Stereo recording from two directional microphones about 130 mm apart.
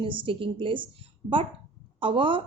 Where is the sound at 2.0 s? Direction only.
40° right (ahead or behind).